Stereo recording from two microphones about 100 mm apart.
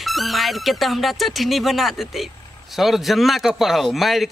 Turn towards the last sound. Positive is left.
turn(degrees=0)  # may be behind; listen again after turning